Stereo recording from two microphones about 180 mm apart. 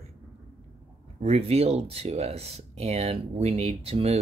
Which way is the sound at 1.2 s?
35° right (ahead or behind).